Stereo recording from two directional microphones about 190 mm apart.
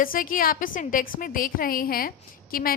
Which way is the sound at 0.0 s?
45° left (ahead or behind).